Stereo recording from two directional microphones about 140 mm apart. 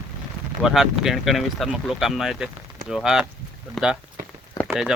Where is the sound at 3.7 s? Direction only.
5° right (ahead or behind).